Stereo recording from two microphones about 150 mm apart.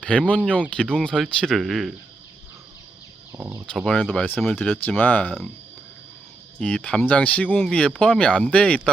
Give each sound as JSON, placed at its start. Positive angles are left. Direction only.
{"t": 0.0, "sound": "speech", "side_deg": 5}
{"t": 3.3, "sound": "speech", "side_deg": -15}
{"t": 3.8, "sound": "speech", "side_deg": 0}
{"t": 6.6, "sound": "speech", "side_deg": 5}